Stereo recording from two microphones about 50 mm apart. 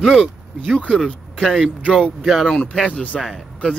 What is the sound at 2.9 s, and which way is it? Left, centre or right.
Speech, left.